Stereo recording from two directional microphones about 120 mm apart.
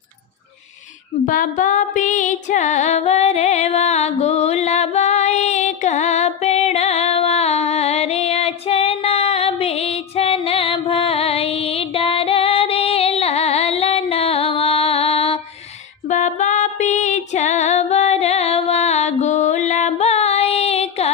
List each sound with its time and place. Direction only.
1.3 s music: 90° left; by 15.4 s 60° left (ahead or behind)
16.0 s music: 90° left; by 21.1 s 65° left (ahead or behind)